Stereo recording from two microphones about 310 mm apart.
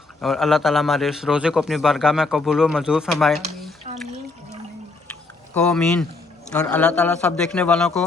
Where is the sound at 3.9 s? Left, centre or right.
Right.